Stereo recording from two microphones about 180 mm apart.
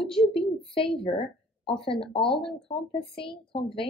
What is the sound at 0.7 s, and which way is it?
Speech, 30° left (ahead or behind).